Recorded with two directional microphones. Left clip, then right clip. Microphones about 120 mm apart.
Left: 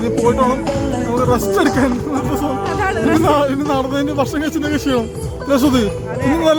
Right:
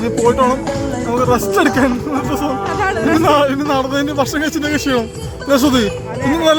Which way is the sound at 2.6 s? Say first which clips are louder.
Right 1 dB; 75° right (ahead or behind).